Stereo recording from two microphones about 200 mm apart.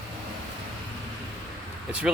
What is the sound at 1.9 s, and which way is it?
Speech, 5° right (ahead or behind).